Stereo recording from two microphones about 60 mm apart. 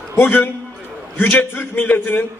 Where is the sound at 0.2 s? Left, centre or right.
Left.